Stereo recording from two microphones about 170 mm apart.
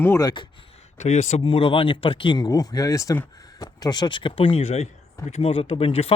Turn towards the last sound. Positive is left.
turn(degrees=35)  # may be behind; listen again after turning